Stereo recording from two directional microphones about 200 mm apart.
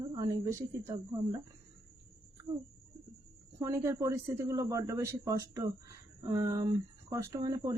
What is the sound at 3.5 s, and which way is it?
A man's voice, 15° right (ahead or behind).